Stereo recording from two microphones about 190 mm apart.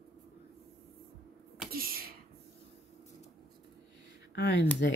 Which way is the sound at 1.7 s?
50° right (ahead or behind).